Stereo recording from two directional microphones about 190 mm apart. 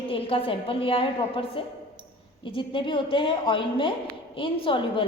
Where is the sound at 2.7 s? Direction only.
25° left (ahead or behind).